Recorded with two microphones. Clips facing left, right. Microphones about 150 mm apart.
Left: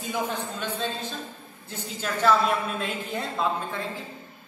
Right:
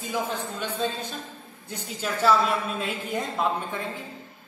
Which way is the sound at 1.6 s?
10° right (ahead or behind).